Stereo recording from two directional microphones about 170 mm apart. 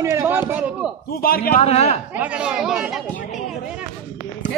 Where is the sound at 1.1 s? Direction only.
60° left (ahead or behind).